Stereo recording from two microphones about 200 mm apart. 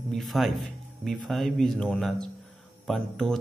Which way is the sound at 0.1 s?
Centre (ahead or behind).